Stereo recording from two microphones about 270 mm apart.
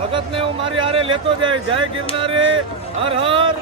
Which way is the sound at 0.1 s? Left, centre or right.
Centre.